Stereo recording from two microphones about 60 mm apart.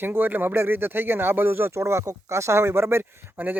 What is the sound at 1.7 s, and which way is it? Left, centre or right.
Speech, right.